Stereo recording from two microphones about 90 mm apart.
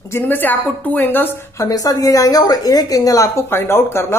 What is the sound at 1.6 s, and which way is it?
A woman's voice, 40° left (ahead or behind).